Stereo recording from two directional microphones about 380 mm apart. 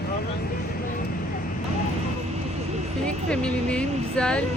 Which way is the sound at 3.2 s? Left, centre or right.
Centre.